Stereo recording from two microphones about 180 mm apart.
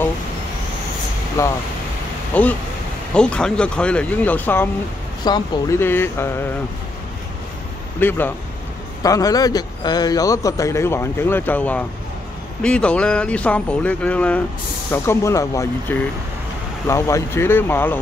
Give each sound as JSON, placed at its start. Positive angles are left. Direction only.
{"t": 1.4, "sound": "speech", "side_deg": 15}
{"t": 8.0, "sound": "a man's voice", "side_deg": 10}